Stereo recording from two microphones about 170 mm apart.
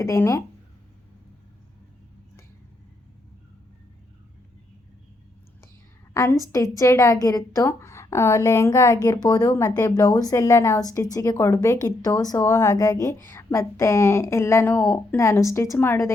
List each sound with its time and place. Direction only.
0.0 s a woman's voice: 20° left (ahead or behind)
6.1 s a woman's voice: 20° left (ahead or behind)